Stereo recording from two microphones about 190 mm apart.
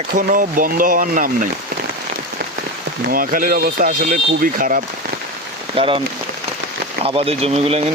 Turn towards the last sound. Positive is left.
turn(degrees=-35)  # may be behind; listen again after turning